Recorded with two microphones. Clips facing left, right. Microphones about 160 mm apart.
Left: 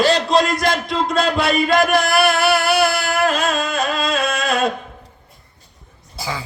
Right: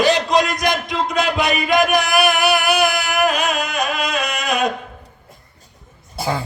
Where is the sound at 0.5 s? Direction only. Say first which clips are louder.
Left 1 dB; 15° right (ahead or behind).